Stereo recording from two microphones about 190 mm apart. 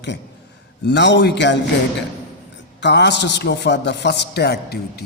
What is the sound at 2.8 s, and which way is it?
A man's voice, 65° left (ahead or behind).